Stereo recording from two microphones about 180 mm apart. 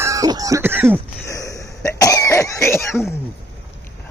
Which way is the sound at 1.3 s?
20° left (ahead or behind).